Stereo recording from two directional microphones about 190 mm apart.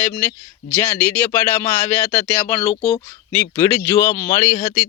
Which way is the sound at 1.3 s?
15° left (ahead or behind).